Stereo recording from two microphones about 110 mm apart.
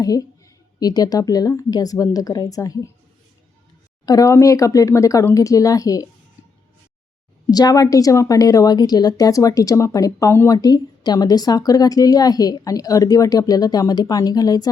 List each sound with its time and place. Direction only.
0.0 s a woman's voice: 35° left (ahead or behind)
4.0 s a woman's voice: 35° left (ahead or behind)
7.5 s a woman's voice: 35° left (ahead or behind)
10.6 s a woman's voice: 40° left (ahead or behind)